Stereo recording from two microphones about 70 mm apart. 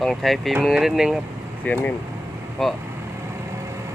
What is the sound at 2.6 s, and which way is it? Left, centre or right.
Speech, centre.